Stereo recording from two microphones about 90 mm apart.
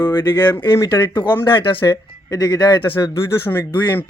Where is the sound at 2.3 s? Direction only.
45° left (ahead or behind); by 3.1 s 60° left (ahead or behind).